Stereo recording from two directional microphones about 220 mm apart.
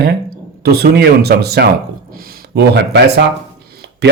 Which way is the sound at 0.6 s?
45° right (ahead or behind).